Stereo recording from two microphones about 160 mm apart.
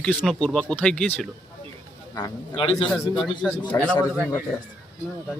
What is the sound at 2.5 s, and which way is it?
Speech, 30° left (ahead or behind).